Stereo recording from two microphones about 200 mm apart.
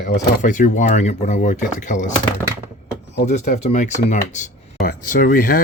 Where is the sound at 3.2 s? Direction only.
35° left (ahead or behind).